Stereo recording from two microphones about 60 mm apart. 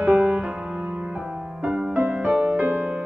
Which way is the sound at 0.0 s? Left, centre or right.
Centre.